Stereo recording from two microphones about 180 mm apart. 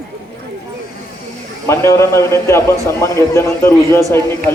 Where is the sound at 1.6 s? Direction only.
15° left (ahead or behind).